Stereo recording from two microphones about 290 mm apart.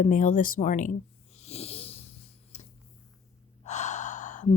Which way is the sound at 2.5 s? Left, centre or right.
Left.